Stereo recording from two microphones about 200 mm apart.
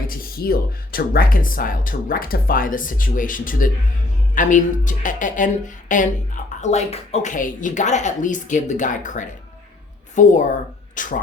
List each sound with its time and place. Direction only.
0.1 s speech: 50° left (ahead or behind)